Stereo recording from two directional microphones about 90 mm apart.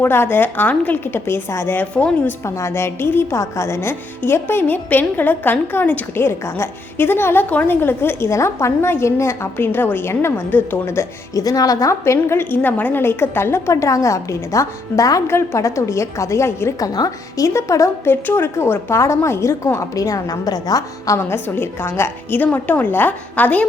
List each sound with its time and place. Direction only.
0.0 s a woman's voice: 25° left (ahead or behind)
2.4 s a woman's voice: 30° left (ahead or behind)
11.4 s a woman's voice: 45° left (ahead or behind)
16.8 s a woman's voice: 45° left (ahead or behind)
21.2 s a woman's voice: 25° left (ahead or behind)